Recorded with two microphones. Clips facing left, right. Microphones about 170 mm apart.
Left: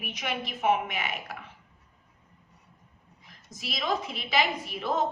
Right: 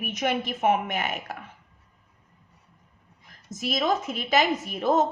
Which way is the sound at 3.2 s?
45° right (ahead or behind).